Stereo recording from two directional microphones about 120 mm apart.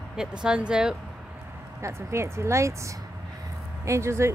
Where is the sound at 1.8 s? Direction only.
25° right (ahead or behind).